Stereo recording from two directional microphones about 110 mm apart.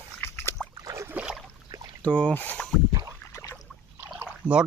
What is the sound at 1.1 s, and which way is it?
Boat, 10° right (ahead or behind).